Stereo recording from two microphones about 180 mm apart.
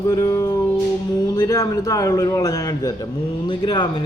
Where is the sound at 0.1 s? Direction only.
20° left (ahead or behind).